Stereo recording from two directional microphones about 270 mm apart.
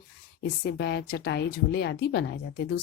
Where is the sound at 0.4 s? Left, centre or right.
Left.